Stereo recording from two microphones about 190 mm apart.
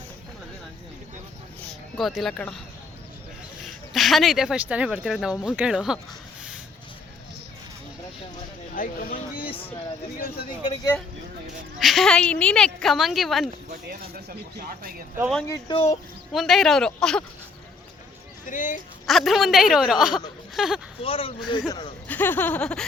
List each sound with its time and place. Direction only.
2.0 s speech: centre (ahead or behind)
3.9 s speech: centre (ahead or behind)
8.7 s speech: 50° left (ahead or behind)
10.6 s speech: 20° left (ahead or behind)
11.8 s speech: centre (ahead or behind)
13.7 s speech: 55° right (ahead or behind)
15.4 s laughter: 15° left (ahead or behind)
16.3 s speech: centre (ahead or behind)
18.4 s speech: 45° left (ahead or behind)
19.0 s speech: centre (ahead or behind)
21.0 s speech: 30° left (ahead or behind)
22.0 s laughter: 10° left (ahead or behind)